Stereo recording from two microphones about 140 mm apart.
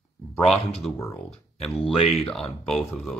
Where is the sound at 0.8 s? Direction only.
10° left (ahead or behind).